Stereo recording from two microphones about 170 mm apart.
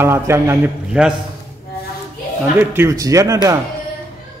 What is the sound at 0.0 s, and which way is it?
A man's voice, 15° right (ahead or behind).